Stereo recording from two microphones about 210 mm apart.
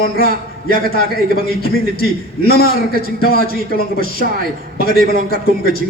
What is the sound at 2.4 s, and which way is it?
A man's voice, 45° left (ahead or behind).